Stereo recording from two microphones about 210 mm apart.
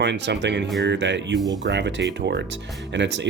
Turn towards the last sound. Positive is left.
turn(degrees=-60)  # may be behind; listen again after turning